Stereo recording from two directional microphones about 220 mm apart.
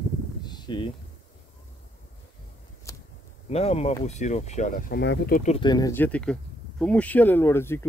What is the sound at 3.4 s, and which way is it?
Speech, 30° left (ahead or behind).